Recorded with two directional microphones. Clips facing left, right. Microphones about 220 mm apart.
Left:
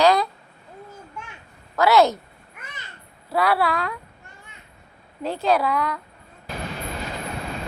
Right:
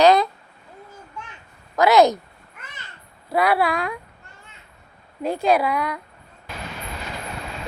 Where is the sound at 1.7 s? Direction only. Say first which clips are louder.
Right 2 dB; 15° right (ahead or behind).